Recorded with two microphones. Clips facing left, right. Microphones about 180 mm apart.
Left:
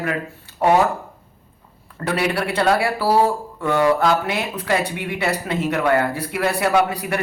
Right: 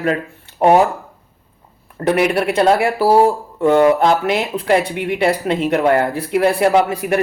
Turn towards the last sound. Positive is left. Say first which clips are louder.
# right 4 dB
turn(degrees=-25)  # may be behind; listen again after turning